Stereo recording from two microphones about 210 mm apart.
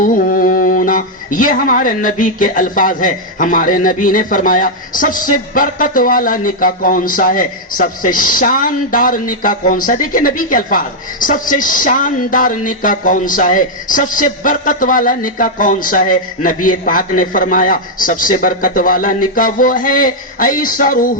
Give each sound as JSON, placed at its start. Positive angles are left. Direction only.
{"t": 0.0, "sound": "speech", "side_deg": 40}